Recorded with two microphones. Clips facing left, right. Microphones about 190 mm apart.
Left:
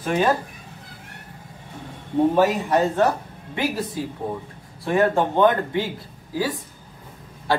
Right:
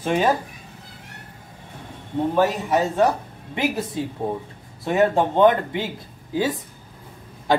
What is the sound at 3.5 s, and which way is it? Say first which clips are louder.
A man's voice: right 1 dB; 25° right (ahead or behind).